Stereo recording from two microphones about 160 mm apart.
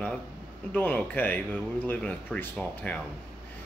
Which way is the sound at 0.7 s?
10° left (ahead or behind).